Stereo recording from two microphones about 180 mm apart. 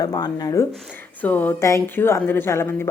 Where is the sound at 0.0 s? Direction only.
20° left (ahead or behind).